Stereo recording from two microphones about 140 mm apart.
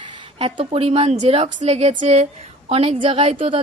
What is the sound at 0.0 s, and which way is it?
A woman's voice, 40° right (ahead or behind).